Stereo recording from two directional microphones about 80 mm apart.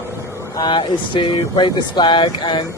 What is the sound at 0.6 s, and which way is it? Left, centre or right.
Speech, left.